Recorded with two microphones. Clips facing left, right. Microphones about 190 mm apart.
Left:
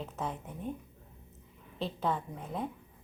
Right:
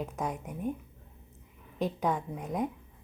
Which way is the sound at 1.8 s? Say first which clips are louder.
Right 3 dB; 15° right (ahead or behind).